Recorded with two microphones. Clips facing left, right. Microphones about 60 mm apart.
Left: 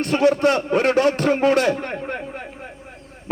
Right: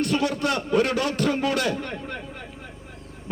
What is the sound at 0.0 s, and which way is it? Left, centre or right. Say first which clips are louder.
A man's voice: left 7 dB; left.